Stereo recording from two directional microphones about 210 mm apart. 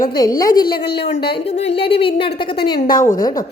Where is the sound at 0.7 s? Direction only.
50° left (ahead or behind).